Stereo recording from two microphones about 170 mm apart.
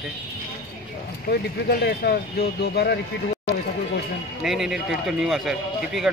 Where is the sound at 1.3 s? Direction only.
65° left (ahead or behind).